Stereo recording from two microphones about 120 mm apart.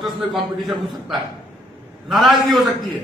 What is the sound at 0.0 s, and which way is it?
A man's voice, centre (ahead or behind).